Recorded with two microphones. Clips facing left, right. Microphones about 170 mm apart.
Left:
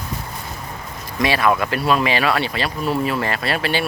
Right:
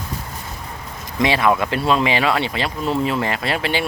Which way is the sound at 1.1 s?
20° right (ahead or behind).